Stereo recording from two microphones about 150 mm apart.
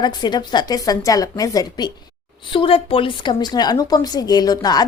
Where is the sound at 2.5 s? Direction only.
40° left (ahead or behind).